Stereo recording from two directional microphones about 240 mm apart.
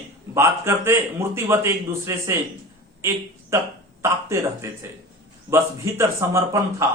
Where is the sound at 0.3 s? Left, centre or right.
Centre.